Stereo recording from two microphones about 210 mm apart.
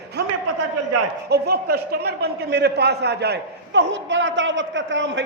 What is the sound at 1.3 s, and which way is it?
A man's voice, 50° right (ahead or behind).